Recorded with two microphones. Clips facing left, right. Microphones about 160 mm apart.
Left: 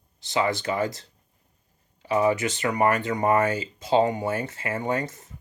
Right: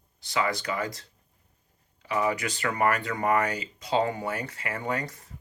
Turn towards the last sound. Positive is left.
turn(degrees=25)  # may be behind; listen again after turning